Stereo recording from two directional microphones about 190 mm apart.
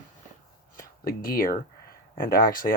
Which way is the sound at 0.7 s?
50° left (ahead or behind).